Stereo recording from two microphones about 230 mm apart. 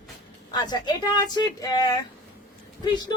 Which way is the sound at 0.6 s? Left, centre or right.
Centre.